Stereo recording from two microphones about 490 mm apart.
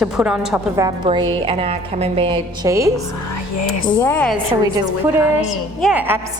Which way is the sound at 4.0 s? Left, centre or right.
Centre.